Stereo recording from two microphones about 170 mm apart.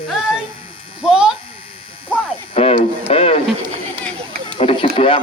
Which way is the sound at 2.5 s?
35° left (ahead or behind).